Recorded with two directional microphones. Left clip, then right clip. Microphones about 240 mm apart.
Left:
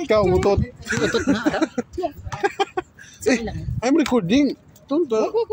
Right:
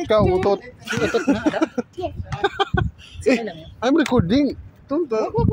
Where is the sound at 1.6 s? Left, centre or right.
Centre.